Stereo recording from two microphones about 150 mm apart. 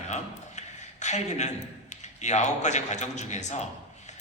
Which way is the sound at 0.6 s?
50° left (ahead or behind).